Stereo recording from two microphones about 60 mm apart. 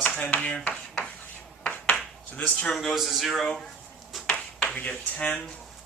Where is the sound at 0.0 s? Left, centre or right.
Left.